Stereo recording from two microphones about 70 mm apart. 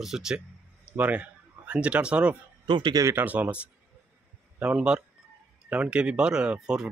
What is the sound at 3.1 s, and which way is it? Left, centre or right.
Speech, right.